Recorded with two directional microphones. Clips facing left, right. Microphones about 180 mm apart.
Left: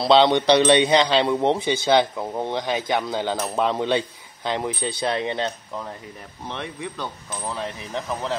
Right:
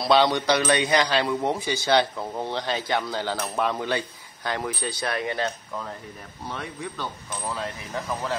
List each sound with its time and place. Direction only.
0.0 s a man's voice: 25° left (ahead or behind)